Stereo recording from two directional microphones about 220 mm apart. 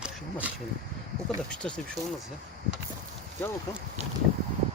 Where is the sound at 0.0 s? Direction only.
5° right (ahead or behind).